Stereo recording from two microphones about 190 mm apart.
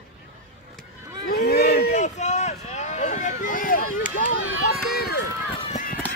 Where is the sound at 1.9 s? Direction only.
40° left (ahead or behind); by 5.2 s 55° left (ahead or behind).